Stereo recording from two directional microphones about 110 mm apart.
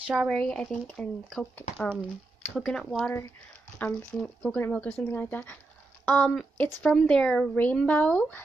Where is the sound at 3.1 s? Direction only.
20° left (ahead or behind).